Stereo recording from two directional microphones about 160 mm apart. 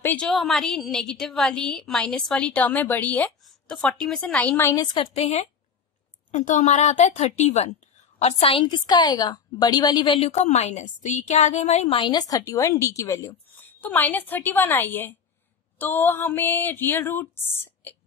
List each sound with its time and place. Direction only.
0.0 s a woman's voice: 5° left (ahead or behind)
4.9 s a woman's voice: 35° left (ahead or behind); by 17.9 s 15° left (ahead or behind)